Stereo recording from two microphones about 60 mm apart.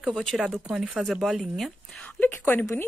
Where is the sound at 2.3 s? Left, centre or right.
Left.